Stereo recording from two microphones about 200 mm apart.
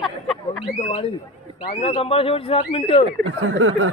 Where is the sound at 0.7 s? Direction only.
30° left (ahead or behind).